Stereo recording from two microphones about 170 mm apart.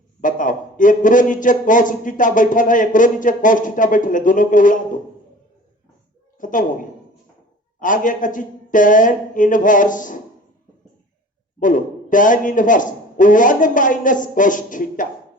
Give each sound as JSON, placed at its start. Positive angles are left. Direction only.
{"t": 0.2, "sound": "speech", "side_deg": 50}
{"t": 6.4, "sound": "a woman's voice", "side_deg": 50}
{"t": 7.8, "sound": "speech", "side_deg": 50}
{"t": 11.6, "sound": "speech", "side_deg": 50}